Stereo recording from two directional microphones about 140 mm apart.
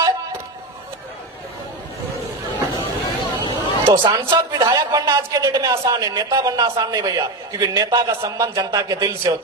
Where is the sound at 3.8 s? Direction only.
25° right (ahead or behind).